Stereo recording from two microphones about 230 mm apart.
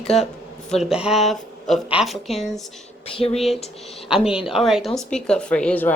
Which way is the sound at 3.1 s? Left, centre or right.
Left.